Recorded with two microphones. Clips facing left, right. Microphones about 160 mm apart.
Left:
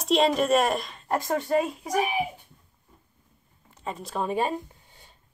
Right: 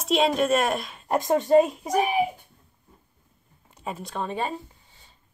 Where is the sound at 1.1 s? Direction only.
20° right (ahead or behind).